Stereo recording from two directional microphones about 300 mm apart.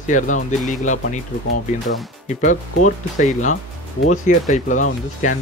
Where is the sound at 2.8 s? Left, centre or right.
Left.